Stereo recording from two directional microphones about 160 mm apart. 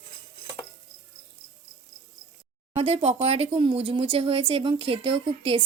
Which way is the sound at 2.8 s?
40° right (ahead or behind).